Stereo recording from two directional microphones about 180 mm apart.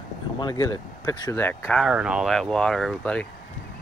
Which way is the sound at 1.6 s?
Centre (ahead or behind).